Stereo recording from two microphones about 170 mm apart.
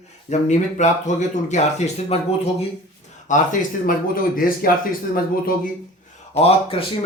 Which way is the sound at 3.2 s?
50° left (ahead or behind).